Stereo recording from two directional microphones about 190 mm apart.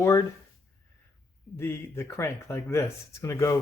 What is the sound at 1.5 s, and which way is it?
Speech, 15° left (ahead or behind).